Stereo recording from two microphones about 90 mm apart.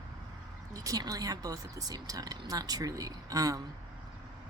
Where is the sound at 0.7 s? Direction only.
40° right (ahead or behind).